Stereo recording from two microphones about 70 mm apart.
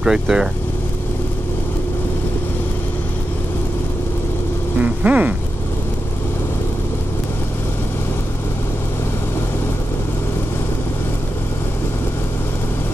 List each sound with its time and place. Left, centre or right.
0.0 s speech: centre
4.7 s vehicle: right